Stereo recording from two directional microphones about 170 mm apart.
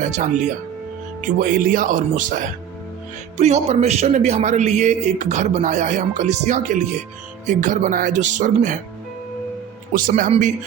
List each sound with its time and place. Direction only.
0.0 s a man's voice: 45° right (ahead or behind)
3.3 s a man's voice: 40° right (ahead or behind)
9.9 s a man's voice: 50° right (ahead or behind)